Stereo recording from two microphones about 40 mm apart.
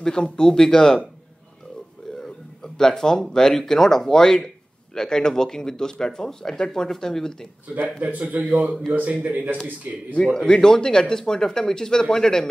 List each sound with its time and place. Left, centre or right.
0.0 s speech: centre
2.2 s speech: centre
7.6 s a man's voice: right
10.4 s speech: centre